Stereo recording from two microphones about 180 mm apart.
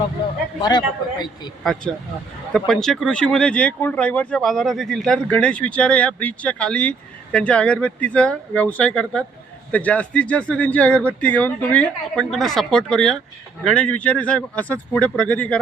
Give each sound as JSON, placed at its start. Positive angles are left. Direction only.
{"t": 0.2, "sound": "speech", "side_deg": 30}
{"t": 1.6, "sound": "speech", "side_deg": 0}